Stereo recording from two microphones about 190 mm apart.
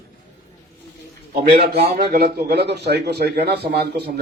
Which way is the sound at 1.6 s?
35° right (ahead or behind).